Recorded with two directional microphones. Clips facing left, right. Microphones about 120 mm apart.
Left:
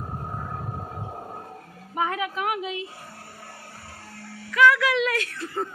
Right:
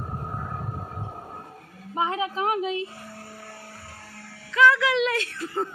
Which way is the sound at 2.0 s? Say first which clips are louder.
Right 1 dB; 25° right (ahead or behind).